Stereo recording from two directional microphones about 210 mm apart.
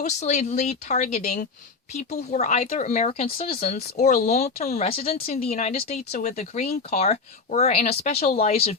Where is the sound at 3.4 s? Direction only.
45° left (ahead or behind).